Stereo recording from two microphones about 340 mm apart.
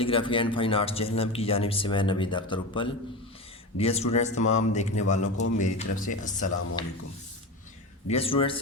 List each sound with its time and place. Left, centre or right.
0.0 s a man's voice: centre
8.1 s speech: centre